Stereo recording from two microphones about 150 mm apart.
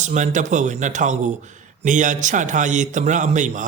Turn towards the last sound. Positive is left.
turn(degrees=-55)  # may be behind; listen again after turning